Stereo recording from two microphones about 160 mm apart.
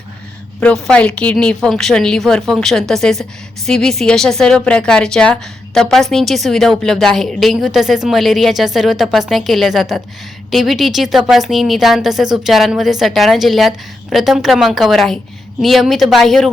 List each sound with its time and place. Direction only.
0.6 s a woman's voice: 5° left (ahead or behind)